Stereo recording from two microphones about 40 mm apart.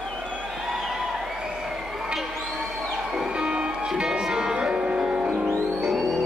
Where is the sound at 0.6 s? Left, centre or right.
Centre.